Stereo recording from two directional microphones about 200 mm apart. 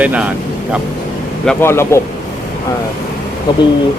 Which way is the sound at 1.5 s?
10° left (ahead or behind).